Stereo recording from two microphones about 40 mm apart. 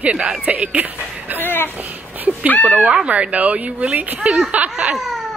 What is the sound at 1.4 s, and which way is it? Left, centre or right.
Speech, left.